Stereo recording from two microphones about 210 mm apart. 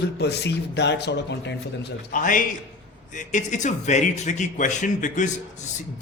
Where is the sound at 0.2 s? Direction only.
55° left (ahead or behind).